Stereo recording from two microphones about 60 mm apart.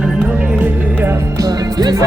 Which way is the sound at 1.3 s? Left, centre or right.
Right.